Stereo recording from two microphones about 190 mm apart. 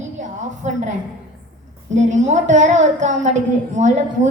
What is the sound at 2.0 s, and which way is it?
A woman's voice, 40° right (ahead or behind).